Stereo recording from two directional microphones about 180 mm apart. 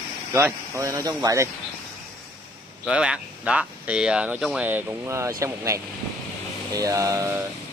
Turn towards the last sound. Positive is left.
turn(degrees=-15)  # may be behind; listen again after turning